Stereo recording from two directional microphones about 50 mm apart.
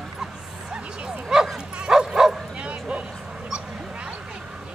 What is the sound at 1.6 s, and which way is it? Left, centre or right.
Bow-wow, centre.